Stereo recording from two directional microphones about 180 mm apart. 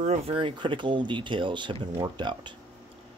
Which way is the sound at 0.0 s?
35° right (ahead or behind).